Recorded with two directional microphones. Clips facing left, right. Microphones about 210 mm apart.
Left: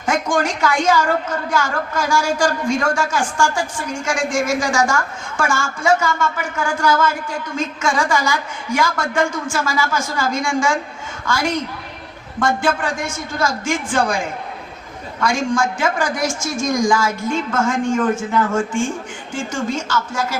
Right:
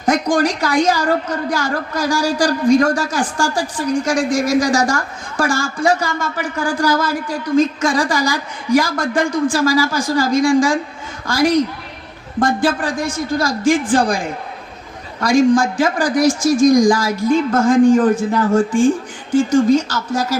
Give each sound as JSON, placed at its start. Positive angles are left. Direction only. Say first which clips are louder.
{"t": 0.0, "sound": "a woman's voice", "louder": "right 4 dB", "side_deg": -35}